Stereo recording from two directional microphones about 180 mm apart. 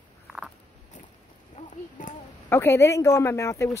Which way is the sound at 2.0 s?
45° left (ahead or behind).